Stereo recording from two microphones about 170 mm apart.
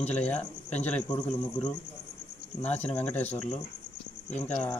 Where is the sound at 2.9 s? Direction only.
10° left (ahead or behind).